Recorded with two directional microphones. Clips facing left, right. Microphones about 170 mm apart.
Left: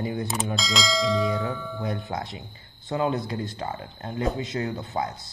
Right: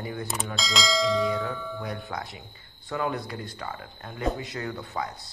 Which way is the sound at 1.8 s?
20° left (ahead or behind).